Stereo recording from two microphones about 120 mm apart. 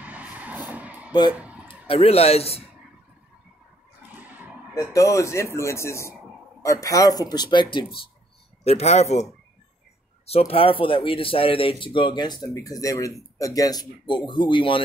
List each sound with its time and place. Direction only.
0.0 s vehicle: 10° right (ahead or behind)
1.3 s a sound: 10° right (ahead or behind)
1.7 s speech: 55° left (ahead or behind)
4.1 s a sound: 15° right (ahead or behind)
4.7 s speech: 25° left (ahead or behind); by 8.0 s 40° left (ahead or behind)
8.6 s speech: 60° left (ahead or behind); by 14.8 s 45° left (ahead or behind)